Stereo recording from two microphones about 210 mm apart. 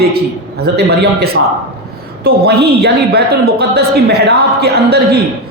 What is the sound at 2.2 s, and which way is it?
A woman's voice, 50° right (ahead or behind).